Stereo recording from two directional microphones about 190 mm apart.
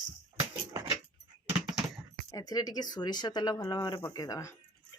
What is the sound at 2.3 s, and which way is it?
Speech, 20° left (ahead or behind).